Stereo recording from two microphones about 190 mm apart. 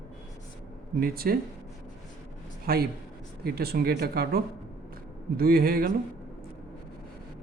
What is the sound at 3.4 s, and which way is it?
Speech, 55° right (ahead or behind).